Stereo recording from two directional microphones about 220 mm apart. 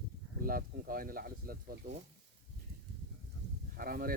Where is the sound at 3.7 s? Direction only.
40° right (ahead or behind).